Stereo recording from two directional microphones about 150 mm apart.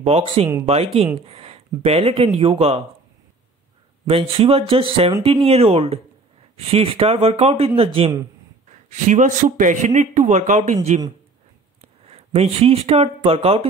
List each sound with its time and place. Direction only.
0.0 s speech: 45° right (ahead or behind)
4.1 s speech: 40° right (ahead or behind)
8.6 s a man's voice: 55° right (ahead or behind)
12.1 s speech: 40° right (ahead or behind)